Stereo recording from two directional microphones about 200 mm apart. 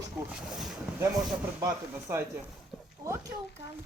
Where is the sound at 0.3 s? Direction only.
5° right (ahead or behind).